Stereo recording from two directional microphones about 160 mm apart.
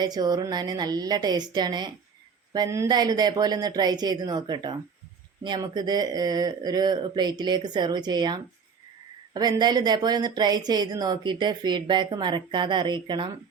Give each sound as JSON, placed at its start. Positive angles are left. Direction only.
{"t": 0.0, "sound": "a woman's voice", "side_deg": -25}